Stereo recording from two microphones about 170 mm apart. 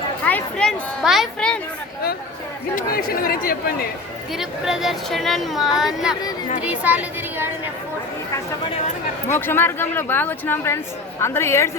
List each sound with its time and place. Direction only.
0.3 s a sound: 10° left (ahead or behind)
1.0 s speech: centre (ahead or behind)
2.7 s speech: 60° left (ahead or behind)
4.3 s speech: centre (ahead or behind)
9.3 s speech: 10° left (ahead or behind)